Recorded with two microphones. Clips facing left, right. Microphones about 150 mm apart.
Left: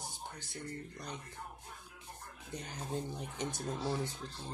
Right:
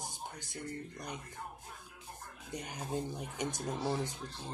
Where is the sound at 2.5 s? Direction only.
15° right (ahead or behind).